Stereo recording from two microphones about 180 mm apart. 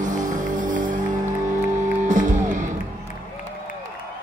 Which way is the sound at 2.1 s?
45° right (ahead or behind).